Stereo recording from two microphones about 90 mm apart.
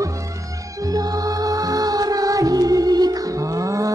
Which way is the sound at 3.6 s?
40° right (ahead or behind).